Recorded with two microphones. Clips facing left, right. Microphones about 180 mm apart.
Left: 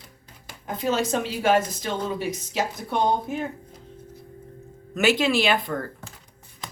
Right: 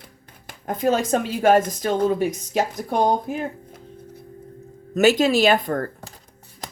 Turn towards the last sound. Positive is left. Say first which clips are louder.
# right 5 dB
turn(degrees=-45)  # may be behind; listen again after turning